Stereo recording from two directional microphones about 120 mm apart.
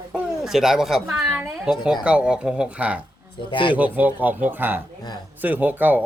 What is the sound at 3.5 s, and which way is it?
Speech, 45° left (ahead or behind).